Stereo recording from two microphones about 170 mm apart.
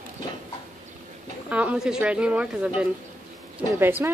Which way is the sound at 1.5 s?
10° right (ahead or behind).